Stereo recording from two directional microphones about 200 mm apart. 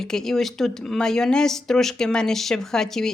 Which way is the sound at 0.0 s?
Centre (ahead or behind).